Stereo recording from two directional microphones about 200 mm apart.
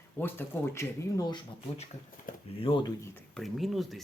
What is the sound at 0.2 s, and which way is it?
Speech, 10° left (ahead or behind).